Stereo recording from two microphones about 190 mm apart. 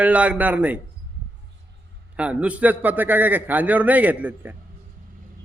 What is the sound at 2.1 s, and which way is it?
A man's voice, 5° right (ahead or behind).